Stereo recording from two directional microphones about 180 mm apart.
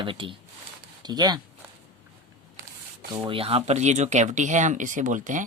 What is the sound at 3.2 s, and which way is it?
Speech, 30° right (ahead or behind).